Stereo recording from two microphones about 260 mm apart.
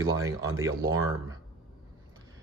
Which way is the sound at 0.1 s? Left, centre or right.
Centre.